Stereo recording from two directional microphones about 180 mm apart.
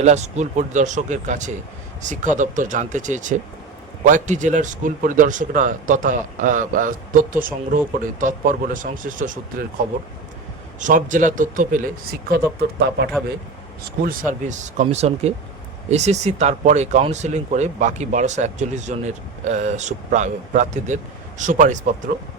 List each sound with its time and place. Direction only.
0.0 s speech: 40° right (ahead or behind)
14.0 s speech: 50° right (ahead or behind)